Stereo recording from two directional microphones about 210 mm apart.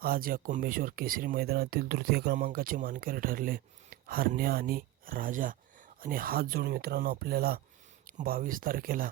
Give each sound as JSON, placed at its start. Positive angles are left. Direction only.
{"t": 0.0, "sound": "speech", "side_deg": -45}